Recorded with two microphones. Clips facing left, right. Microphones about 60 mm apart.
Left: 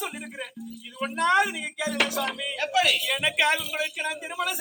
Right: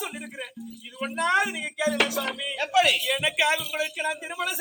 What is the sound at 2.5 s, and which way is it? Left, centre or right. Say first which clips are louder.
Speech: right 3 dB; centre.